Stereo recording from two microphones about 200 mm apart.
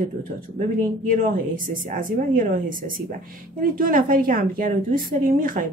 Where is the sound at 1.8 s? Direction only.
40° right (ahead or behind).